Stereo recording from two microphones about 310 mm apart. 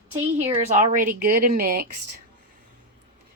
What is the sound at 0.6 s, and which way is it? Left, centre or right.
A woman's voice, right.